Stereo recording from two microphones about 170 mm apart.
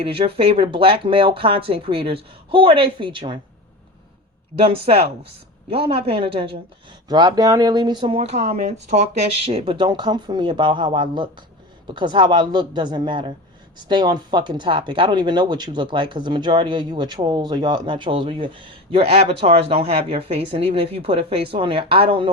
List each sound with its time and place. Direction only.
0.0 s speech: 35° right (ahead or behind)
4.7 s speech: 35° right (ahead or behind)